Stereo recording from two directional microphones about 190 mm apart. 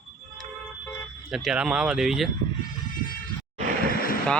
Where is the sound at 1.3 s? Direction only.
Centre (ahead or behind).